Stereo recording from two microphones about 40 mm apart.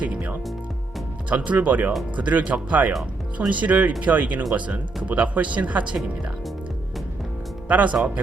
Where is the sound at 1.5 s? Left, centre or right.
Right.